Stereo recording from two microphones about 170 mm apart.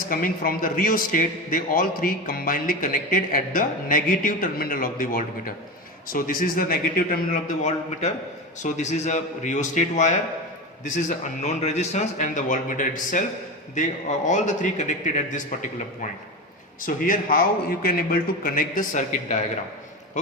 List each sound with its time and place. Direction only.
0.1 s a man's voice: 55° left (ahead or behind)
11.4 s a man's voice: 40° left (ahead or behind)
16.8 s a man's voice: 55° left (ahead or behind)